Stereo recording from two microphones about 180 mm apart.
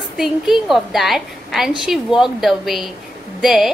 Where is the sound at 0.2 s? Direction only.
Centre (ahead or behind).